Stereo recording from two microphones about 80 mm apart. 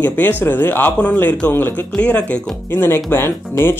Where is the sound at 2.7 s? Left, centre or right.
Left.